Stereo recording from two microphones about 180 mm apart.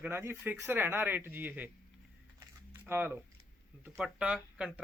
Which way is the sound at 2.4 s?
10° right (ahead or behind).